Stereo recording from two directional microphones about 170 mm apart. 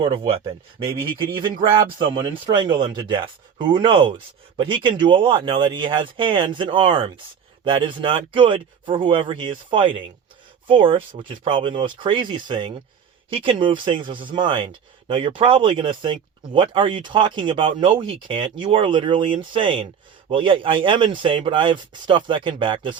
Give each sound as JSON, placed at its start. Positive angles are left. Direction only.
{"t": 0.0, "sound": "speech", "side_deg": -30}